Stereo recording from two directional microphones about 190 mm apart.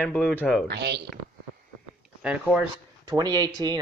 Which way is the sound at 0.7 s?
60° right (ahead or behind).